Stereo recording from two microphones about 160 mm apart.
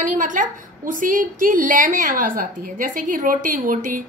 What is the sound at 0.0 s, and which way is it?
A woman's voice, 55° right (ahead or behind).